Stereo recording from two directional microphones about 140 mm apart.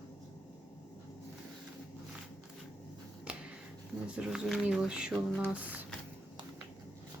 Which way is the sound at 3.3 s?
10° right (ahead or behind).